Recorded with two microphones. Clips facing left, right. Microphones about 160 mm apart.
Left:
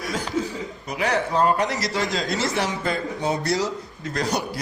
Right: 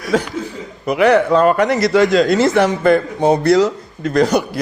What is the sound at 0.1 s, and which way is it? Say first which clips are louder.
A man's voice: right 9 dB; 75° right (ahead or behind).